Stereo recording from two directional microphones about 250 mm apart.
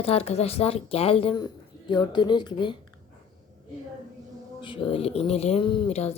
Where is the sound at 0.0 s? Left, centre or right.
Left.